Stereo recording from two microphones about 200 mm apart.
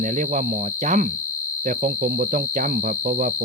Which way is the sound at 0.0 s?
40° right (ahead or behind).